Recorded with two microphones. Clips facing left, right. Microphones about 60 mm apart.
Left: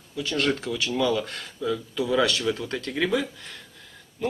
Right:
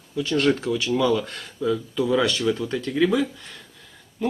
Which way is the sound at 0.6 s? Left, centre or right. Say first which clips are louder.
Right 4 dB; right.